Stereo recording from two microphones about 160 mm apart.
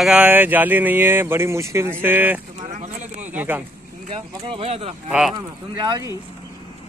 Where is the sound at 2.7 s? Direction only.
45° right (ahead or behind).